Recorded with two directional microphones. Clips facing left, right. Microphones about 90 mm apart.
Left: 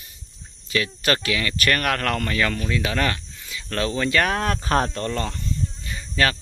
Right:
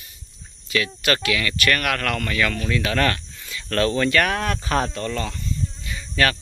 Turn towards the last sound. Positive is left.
turn(degrees=25)  # may be behind; listen again after turning